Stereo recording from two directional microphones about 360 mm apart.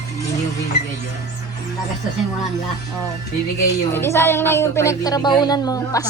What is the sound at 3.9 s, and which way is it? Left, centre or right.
Speech, centre.